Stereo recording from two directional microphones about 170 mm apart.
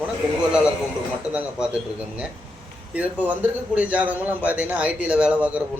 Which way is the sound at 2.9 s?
10° right (ahead or behind).